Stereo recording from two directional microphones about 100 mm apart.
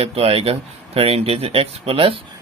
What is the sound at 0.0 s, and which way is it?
Speech, 80° right.